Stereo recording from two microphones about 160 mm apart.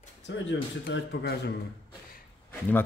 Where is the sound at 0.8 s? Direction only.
85° left.